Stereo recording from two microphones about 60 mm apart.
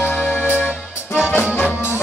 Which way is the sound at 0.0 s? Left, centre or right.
Left.